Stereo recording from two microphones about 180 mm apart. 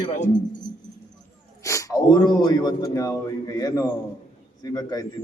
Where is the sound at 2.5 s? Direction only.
20° left (ahead or behind).